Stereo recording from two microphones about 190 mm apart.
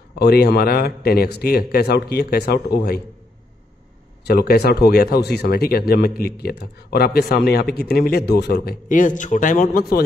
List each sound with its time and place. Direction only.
0.2 s speech: 55° left (ahead or behind)
4.2 s speech: 55° left (ahead or behind)
8.8 s a man's voice: 45° left (ahead or behind)